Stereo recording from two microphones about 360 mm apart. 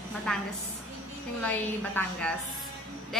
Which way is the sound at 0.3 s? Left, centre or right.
Centre.